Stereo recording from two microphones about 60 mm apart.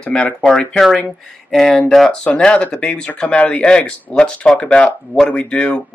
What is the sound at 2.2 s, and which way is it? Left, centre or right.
Speech, centre.